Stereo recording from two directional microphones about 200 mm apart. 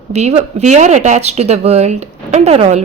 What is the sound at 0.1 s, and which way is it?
Speech, 35° right (ahead or behind).